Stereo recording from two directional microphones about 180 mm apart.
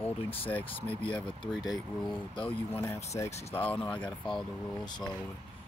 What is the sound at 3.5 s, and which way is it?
Speech, 10° left (ahead or behind).